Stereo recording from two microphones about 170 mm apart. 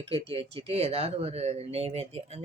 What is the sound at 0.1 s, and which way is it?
Speech, 35° right (ahead or behind).